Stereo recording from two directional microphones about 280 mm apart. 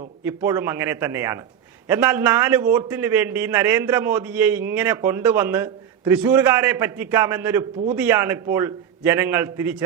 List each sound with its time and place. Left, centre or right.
0.3 s a man's voice: centre